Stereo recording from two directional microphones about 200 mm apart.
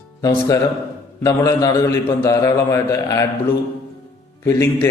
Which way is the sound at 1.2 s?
15° left (ahead or behind).